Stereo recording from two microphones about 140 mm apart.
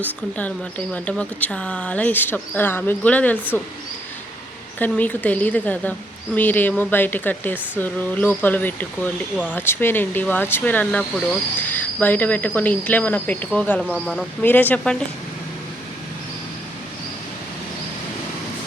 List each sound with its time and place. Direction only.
0.0 s speech: 10° left (ahead or behind)
4.8 s speech: 10° left (ahead or behind)
14.4 s speech: 10° left (ahead or behind)